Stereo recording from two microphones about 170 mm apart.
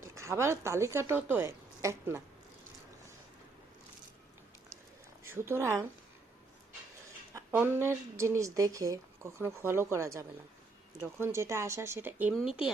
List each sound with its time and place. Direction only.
0.0 s speech: 15° right (ahead or behind)
5.2 s a woman's voice: 15° right (ahead or behind)
7.3 s speech: 15° right (ahead or behind)